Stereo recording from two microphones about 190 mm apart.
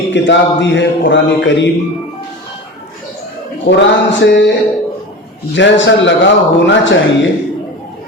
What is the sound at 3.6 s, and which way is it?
Speech, 70° left (ahead or behind).